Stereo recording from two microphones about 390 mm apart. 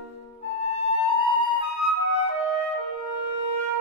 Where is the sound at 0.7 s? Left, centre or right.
Right.